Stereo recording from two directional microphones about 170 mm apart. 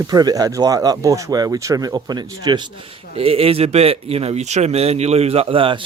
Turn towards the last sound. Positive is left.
turn(degrees=-30)  # may be behind; listen again after turning